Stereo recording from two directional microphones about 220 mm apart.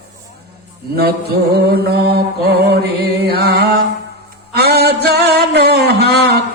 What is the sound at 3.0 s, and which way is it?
Music, 45° right (ahead or behind).